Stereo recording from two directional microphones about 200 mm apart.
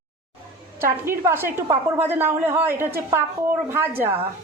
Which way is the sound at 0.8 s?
15° right (ahead or behind).